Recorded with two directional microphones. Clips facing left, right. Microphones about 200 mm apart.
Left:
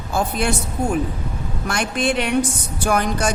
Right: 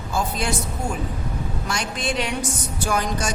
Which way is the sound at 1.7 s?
60° left (ahead or behind).